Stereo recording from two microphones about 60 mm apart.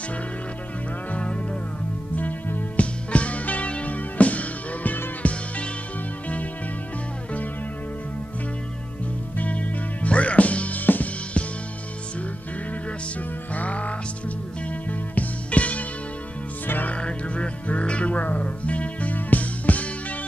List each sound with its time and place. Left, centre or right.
1.1 s music: centre
2.1 s music: left
9.4 s music: left
13.6 s music: left
16.9 s music: centre